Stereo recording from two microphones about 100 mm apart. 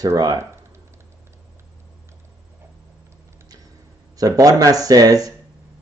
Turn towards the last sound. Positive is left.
turn(degrees=-35)  # may be behind; listen again after turning